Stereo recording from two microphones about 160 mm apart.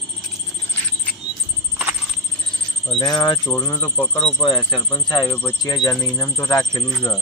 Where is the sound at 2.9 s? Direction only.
25° left (ahead or behind).